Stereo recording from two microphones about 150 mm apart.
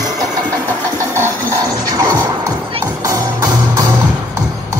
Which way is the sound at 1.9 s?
25° right (ahead or behind).